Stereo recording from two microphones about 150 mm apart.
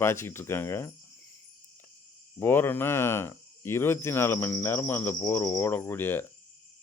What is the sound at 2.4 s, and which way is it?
Speech, 15° left (ahead or behind).